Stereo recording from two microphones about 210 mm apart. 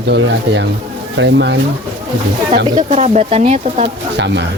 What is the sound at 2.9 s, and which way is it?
Speech, 30° right (ahead or behind).